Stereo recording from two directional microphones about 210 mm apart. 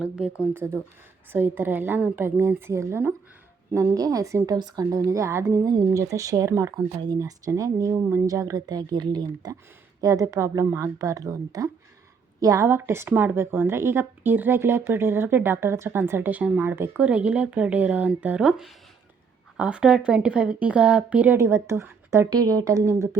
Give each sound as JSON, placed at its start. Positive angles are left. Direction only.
{"t": 0.5, "sound": "a woman's voice", "side_deg": -10}